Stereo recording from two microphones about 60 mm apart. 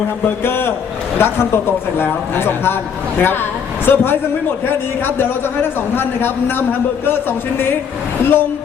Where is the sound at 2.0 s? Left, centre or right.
Left.